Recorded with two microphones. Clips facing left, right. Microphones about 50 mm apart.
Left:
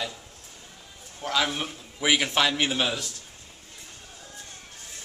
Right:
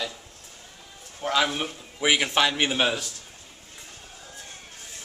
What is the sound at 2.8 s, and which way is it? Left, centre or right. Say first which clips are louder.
Speech: right 3 dB; right.